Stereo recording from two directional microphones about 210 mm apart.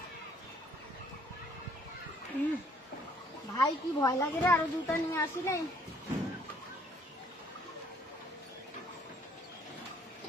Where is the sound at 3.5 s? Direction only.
15° left (ahead or behind).